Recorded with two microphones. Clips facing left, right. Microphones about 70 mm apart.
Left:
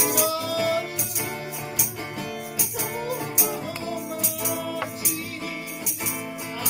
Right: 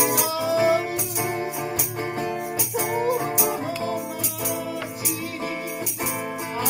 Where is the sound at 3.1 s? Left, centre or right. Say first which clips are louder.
Right 5 dB; right.